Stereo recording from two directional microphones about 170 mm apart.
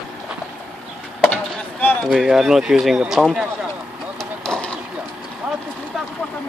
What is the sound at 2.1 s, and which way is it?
Speech, centre (ahead or behind).